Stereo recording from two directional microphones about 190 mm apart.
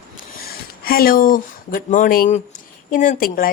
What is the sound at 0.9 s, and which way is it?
A woman's voice, 50° left (ahead or behind).